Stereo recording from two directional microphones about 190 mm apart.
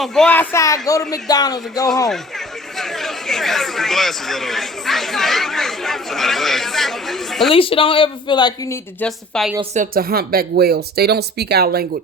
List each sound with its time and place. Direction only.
0.0 s speech: centre (ahead or behind); by 1.9 s 20° left (ahead or behind)
2.7 s speech: centre (ahead or behind)
7.5 s speech: 30° left (ahead or behind)
9.0 s speech: centre (ahead or behind)
9.7 s speech: 45° right (ahead or behind)